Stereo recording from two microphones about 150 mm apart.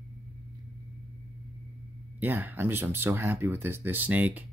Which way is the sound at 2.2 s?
15° right (ahead or behind).